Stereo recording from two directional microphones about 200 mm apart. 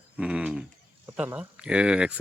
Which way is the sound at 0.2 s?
5° right (ahead or behind).